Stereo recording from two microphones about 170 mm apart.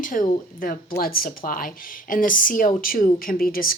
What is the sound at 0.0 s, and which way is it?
Speech, 50° left (ahead or behind).